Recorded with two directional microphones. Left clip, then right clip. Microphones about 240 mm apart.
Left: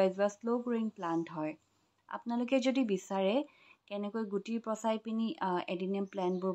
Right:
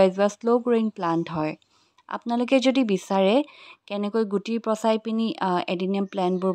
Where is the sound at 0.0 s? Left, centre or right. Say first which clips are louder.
Right 10 dB; right.